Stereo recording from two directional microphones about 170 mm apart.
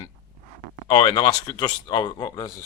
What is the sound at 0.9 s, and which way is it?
Speech, 25° left (ahead or behind).